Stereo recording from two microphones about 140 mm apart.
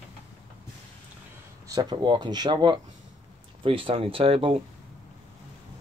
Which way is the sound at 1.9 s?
35° right (ahead or behind).